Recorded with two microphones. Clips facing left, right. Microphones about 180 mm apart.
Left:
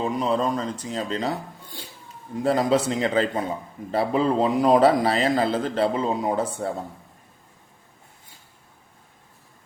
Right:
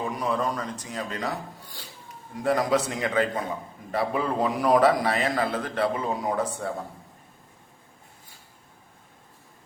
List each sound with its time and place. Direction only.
0.0 s a man's voice: 25° left (ahead or behind)